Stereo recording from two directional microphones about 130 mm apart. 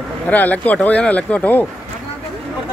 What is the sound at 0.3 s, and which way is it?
Speech, 10° left (ahead or behind).